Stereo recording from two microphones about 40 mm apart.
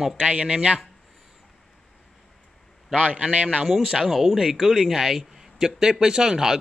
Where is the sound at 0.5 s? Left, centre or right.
Right.